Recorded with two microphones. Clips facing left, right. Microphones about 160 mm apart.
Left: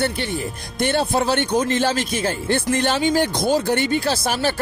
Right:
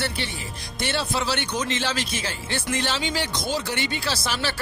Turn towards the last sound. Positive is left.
turn(degrees=50)  # may be behind; listen again after turning